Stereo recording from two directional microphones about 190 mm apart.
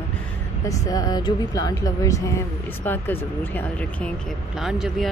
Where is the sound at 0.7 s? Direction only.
20° left (ahead or behind).